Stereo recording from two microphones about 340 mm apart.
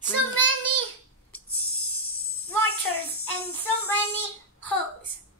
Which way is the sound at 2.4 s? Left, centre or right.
Left.